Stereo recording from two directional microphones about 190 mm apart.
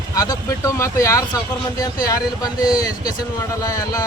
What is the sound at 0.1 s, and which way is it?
Speech, 20° left (ahead or behind).